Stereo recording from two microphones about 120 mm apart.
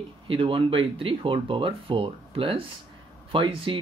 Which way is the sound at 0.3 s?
45° right (ahead or behind).